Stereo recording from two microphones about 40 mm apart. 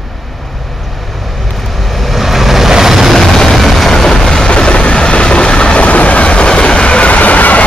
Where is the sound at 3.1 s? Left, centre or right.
Centre; by 7.6 s left.